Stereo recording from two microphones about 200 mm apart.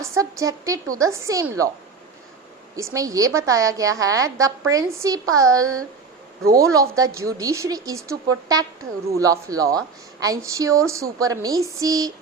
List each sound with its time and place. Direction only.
0.0 s speech: 15° right (ahead or behind)
2.7 s speech: 15° right (ahead or behind)
6.7 s speech: 15° right (ahead or behind)